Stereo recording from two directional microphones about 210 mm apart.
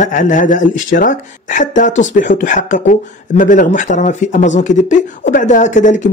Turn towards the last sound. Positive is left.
turn(degrees=35)  # may be behind; listen again after turning